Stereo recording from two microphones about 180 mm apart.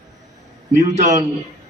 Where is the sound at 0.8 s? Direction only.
40° right (ahead or behind).